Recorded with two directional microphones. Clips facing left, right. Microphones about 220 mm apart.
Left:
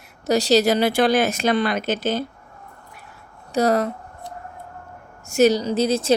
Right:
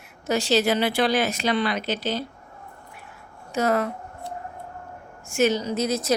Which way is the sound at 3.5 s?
35° left (ahead or behind).